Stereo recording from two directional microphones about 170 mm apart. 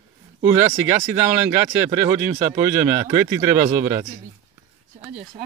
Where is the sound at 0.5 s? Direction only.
20° right (ahead or behind).